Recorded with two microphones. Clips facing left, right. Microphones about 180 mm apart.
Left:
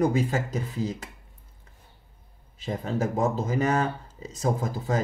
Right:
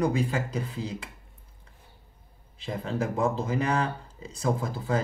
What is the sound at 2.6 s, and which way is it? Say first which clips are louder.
Speech: left 2 dB; 40° left (ahead or behind).